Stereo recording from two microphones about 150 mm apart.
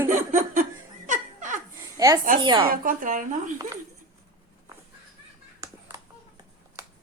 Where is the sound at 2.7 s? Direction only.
65° right (ahead or behind).